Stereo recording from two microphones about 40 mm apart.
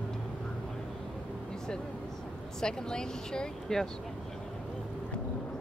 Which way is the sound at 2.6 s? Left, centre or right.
Centre.